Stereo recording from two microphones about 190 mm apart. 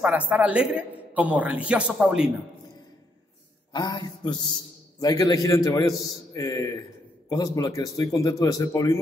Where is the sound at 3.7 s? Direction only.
20° left (ahead or behind).